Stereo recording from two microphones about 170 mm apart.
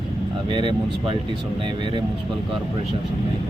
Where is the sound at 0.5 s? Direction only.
30° right (ahead or behind).